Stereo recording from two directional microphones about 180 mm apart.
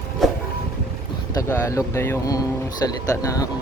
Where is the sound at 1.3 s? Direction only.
15° left (ahead or behind).